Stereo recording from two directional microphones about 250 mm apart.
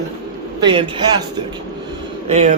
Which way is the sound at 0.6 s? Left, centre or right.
Centre.